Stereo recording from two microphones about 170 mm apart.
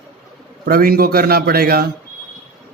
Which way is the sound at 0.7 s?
60° right (ahead or behind).